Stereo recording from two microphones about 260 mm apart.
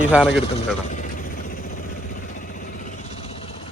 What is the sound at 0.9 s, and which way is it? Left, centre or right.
Vehicle, left.